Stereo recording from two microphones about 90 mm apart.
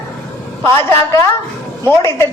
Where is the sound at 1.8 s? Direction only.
30° left (ahead or behind).